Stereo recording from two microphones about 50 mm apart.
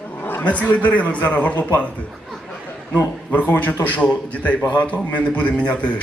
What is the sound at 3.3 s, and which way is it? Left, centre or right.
A man's voice, left.